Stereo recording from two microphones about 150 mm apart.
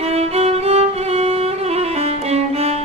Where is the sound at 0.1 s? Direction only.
45° right (ahead or behind).